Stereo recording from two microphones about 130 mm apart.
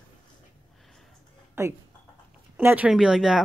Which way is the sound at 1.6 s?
20° right (ahead or behind).